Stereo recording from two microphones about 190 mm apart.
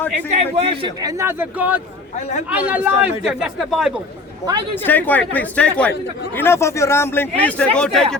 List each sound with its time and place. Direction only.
0.3 s a man's voice: 35° right (ahead or behind); by 3.9 s 5° right (ahead or behind)
4.9 s speech: 10° left (ahead or behind)